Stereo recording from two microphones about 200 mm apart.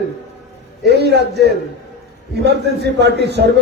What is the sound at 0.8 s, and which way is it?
A man's voice, 55° right (ahead or behind).